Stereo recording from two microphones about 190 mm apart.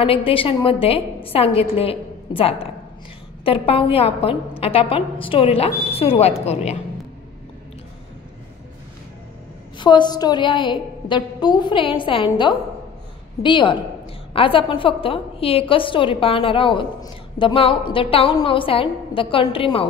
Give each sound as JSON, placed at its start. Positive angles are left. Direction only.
{"t": 0.0, "sound": "a woman's voice", "side_deg": 30}
{"t": 9.8, "sound": "a woman's voice", "side_deg": 25}